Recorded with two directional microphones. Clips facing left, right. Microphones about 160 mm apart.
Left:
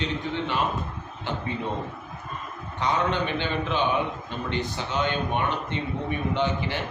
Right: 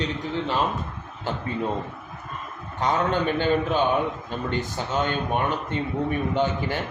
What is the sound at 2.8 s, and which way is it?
A man's voice, 45° right (ahead or behind).